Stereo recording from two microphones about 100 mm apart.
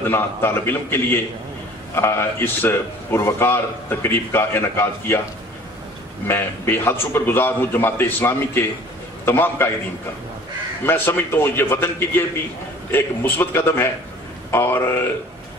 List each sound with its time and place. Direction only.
0.1 s a man's voice: 25° left (ahead or behind)
6.2 s a man's voice: 25° left (ahead or behind)
10.9 s a man's voice: 20° left (ahead or behind)
12.9 s a man's voice: 25° left (ahead or behind)